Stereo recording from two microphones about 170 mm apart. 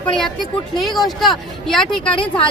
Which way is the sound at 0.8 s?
Centre (ahead or behind).